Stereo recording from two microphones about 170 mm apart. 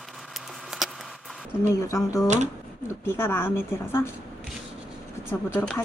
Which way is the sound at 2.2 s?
45° right (ahead or behind).